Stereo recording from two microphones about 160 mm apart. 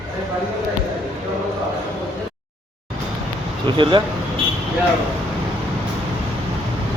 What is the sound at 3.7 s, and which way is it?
Speech, 30° right (ahead or behind).